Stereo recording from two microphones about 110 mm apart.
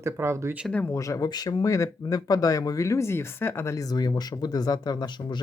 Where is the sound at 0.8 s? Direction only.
30° left (ahead or behind).